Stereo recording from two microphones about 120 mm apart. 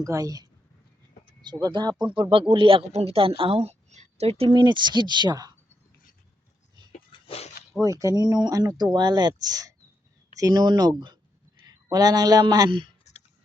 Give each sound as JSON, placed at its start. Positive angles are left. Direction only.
{"t": 0.0, "sound": "speech", "side_deg": -30}
{"t": 1.7, "sound": "speech", "side_deg": -35}
{"t": 2.5, "sound": "a woman's voice", "side_deg": -45}
{"t": 4.5, "sound": "speech", "side_deg": -40}
{"t": 7.1, "sound": "a sound", "side_deg": 55}
{"t": 7.7, "sound": "speech", "side_deg": -25}